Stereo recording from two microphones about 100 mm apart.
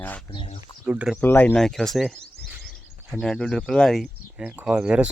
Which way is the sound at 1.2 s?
20° left (ahead or behind).